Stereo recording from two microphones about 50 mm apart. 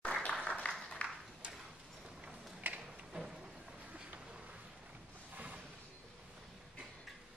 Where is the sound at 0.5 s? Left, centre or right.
Centre.